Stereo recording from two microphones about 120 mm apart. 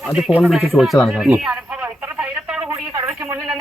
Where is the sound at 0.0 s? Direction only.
5° right (ahead or behind).